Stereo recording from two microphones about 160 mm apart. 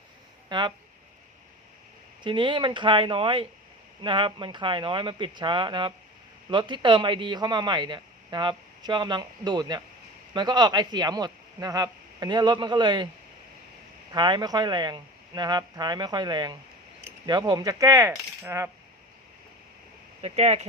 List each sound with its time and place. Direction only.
0.4 s speech: 30° right (ahead or behind)
2.2 s speech: 30° right (ahead or behind)
14.1 s speech: 25° right (ahead or behind)
18.1 s coin: 15° right (ahead or behind)
20.2 s speech: 40° right (ahead or behind)